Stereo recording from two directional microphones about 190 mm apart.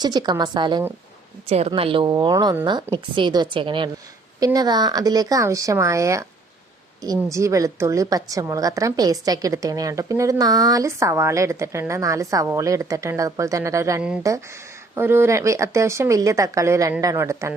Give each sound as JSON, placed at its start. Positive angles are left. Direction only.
{"t": 0.0, "sound": "a woman's voice", "side_deg": -20}